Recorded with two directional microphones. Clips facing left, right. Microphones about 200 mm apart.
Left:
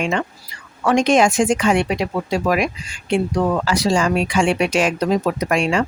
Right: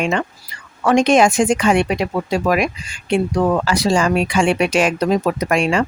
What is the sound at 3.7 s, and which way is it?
Speech, 60° right (ahead or behind).